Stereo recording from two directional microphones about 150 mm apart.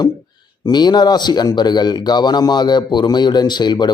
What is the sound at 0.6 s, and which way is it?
Speech, 30° left (ahead or behind).